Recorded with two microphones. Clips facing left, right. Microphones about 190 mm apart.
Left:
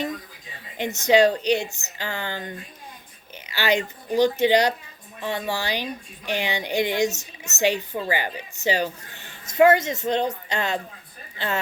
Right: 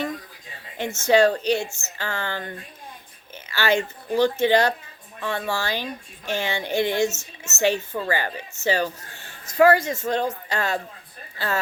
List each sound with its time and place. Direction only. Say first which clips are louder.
0.8 s a woman's voice: even; 15° left (ahead or behind)